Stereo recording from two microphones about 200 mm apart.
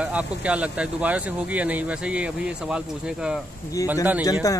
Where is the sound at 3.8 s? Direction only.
15° left (ahead or behind).